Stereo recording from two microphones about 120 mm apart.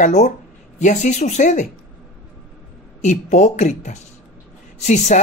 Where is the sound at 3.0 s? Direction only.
80° left.